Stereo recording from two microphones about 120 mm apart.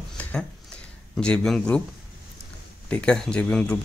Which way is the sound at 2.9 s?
10° left (ahead or behind).